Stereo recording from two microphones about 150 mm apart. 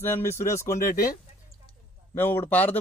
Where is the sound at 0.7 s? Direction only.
70° left (ahead or behind).